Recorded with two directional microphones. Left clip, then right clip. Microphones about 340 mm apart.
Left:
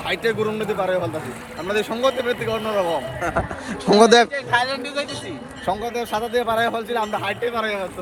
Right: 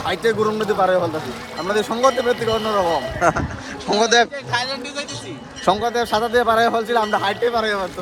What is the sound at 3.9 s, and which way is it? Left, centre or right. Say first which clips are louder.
A man's voice: left 3 dB; centre.